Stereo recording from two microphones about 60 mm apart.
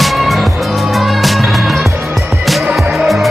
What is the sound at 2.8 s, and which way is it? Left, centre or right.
Music, centre.